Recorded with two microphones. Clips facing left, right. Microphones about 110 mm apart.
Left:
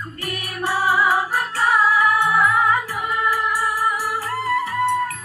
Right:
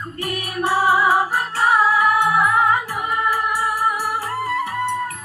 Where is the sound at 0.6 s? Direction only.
20° right (ahead or behind).